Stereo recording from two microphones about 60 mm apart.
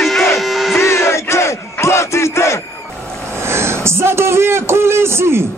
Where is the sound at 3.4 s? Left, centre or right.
Right.